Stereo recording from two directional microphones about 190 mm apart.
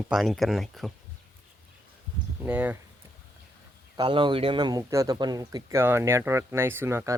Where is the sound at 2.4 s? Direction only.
10° right (ahead or behind).